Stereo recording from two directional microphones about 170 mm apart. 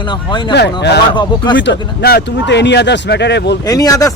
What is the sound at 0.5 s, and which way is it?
Speech, 80° left.